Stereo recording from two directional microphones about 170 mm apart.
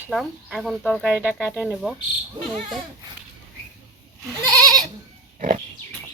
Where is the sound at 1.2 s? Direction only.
5° right (ahead or behind).